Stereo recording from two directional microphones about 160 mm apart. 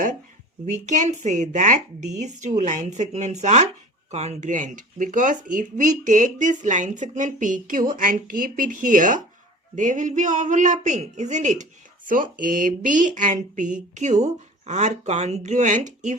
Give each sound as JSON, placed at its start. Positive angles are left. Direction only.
{"t": 0.6, "sound": "a man's voice", "side_deg": -50}